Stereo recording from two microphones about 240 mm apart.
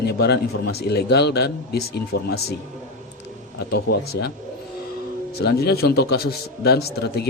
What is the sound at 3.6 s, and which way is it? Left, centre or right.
Speech, left.